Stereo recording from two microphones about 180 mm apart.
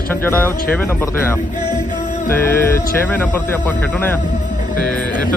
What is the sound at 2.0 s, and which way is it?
Music, 45° left (ahead or behind).